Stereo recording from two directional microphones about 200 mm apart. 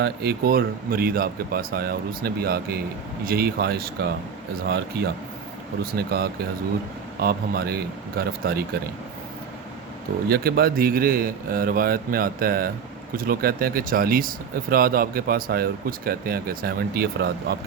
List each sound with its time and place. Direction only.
0.0 s speech: 55° right (ahead or behind)
5.8 s speech: 50° right (ahead or behind)
10.2 s speech: 50° right (ahead or behind)